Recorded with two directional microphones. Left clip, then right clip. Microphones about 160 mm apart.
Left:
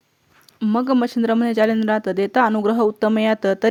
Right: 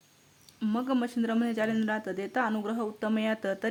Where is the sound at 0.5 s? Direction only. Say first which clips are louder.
Left 11 dB; 50° left (ahead or behind).